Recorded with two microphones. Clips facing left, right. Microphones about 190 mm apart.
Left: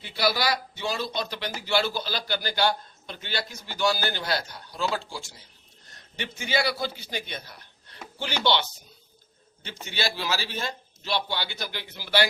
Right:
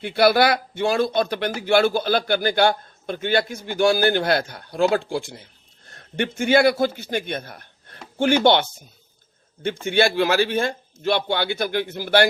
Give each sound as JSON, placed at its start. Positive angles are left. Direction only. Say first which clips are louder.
{"t": 0.0, "sound": "a man's voice", "louder": "right 9 dB", "side_deg": -55}